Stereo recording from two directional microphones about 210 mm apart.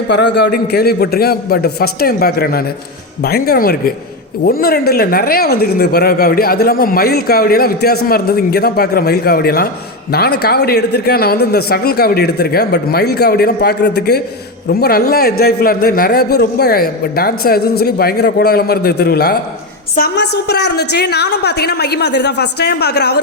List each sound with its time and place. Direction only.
0.1 s a man's voice: 55° left (ahead or behind)